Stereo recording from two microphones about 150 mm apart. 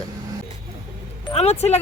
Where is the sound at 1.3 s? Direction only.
45° left (ahead or behind).